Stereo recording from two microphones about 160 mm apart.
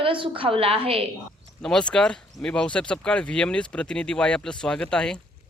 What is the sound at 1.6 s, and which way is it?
A man's voice, 5° left (ahead or behind).